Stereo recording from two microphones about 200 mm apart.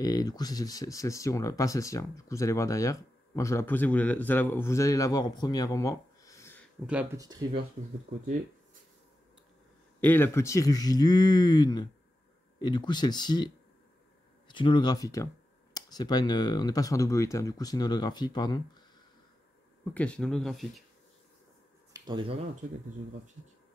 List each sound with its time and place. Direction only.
0.0 s speech: 20° left (ahead or behind)
7.2 s speech: 20° right (ahead or behind)
9.9 s speech: 10° left (ahead or behind)
14.5 s speech: 25° left (ahead or behind)
19.8 s speech: 5° left (ahead or behind)
21.9 s speech: 20° right (ahead or behind)